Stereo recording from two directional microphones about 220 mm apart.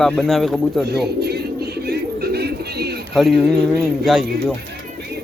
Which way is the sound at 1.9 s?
45° right (ahead or behind).